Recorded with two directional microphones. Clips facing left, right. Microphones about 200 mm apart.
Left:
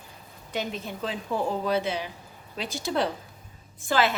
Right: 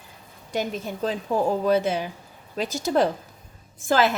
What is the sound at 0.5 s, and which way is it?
A woman's voice, 45° right (ahead or behind).